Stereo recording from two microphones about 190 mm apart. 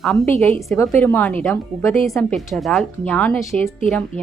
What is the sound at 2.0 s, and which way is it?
A woman's voice, centre (ahead or behind).